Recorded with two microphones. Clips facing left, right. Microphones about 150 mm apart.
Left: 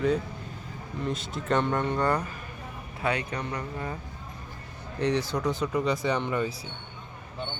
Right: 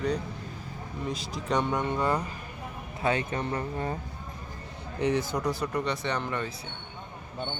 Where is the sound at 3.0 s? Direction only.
25° right (ahead or behind).